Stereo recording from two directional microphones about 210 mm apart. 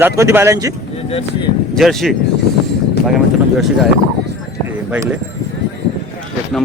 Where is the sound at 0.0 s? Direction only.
10° right (ahead or behind).